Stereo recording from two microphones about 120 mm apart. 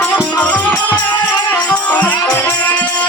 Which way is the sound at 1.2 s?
35° left (ahead or behind).